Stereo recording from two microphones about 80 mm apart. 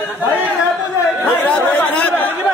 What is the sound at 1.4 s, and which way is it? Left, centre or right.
Chatter, centre.